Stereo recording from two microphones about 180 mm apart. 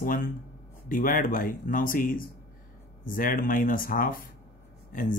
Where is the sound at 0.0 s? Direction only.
50° left (ahead or behind).